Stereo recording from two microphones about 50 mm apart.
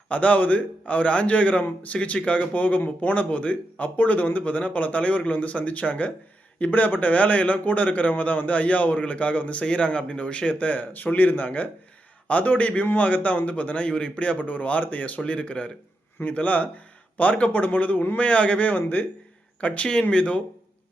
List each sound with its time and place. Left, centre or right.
0.1 s a man's voice: left